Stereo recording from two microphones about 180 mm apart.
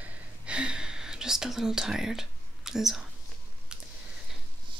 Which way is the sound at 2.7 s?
Centre (ahead or behind).